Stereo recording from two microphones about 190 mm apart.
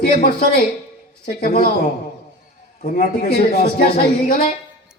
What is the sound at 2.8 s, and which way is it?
Speech, 50° left (ahead or behind).